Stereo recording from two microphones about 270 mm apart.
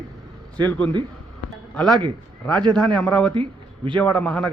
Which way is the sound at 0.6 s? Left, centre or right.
Centre.